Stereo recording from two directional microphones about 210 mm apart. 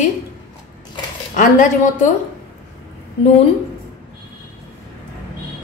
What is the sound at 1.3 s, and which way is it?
Speech, 35° left (ahead or behind).